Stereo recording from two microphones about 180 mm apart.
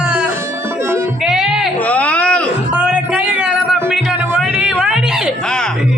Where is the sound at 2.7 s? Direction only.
5° right (ahead or behind).